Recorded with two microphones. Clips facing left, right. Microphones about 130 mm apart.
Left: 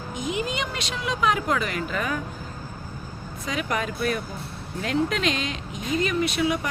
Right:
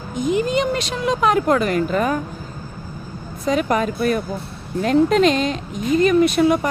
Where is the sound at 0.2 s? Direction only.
40° right (ahead or behind).